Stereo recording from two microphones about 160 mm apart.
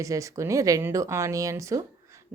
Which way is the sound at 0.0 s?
20° right (ahead or behind).